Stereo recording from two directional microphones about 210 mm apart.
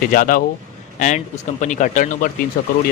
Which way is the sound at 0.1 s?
40° left (ahead or behind).